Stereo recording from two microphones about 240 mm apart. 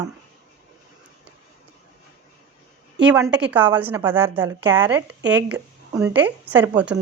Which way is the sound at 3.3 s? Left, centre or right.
Centre.